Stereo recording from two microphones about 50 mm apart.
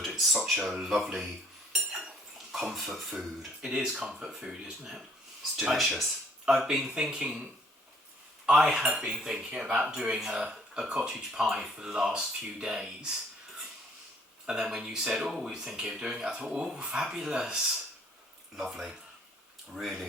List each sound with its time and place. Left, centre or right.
0.1 s speech: centre
1.7 s dishes: centre
3.7 s speech: centre
6.7 s speech: centre
8.4 s speech: centre
14.4 s speech: centre
18.5 s speech: centre